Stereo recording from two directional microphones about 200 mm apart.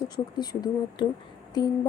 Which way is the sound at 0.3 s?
20° left (ahead or behind).